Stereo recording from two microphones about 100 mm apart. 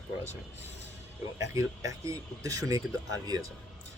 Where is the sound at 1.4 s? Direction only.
35° right (ahead or behind).